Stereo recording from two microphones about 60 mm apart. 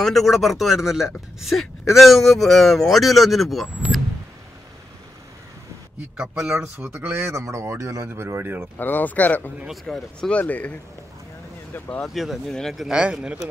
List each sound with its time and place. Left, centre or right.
0.0 s speech: centre
6.1 s a man's voice: centre
6.8 s speech: right
7.3 s speech: right
8.1 s speech: right
8.7 s speech: left
9.9 s speech: centre
10.4 s speech: left
12.1 s speech: centre
13.0 s a man's voice: centre